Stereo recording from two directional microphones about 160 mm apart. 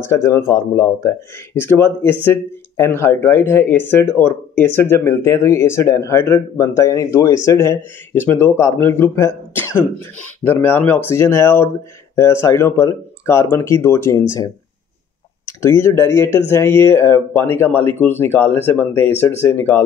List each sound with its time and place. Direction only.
0.0 s speech: 15° left (ahead or behind)
15.4 s speech: 20° left (ahead or behind)